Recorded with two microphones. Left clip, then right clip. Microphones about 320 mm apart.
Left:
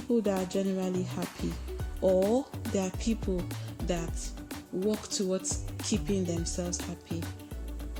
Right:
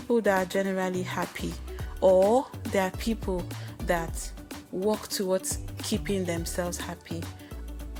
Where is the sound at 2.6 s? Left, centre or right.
Centre.